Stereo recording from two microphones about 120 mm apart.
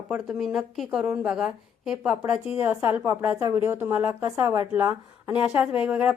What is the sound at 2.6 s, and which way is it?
A woman's voice, 20° right (ahead or behind).